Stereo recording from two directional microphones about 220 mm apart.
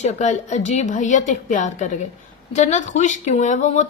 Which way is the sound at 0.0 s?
30° left (ahead or behind).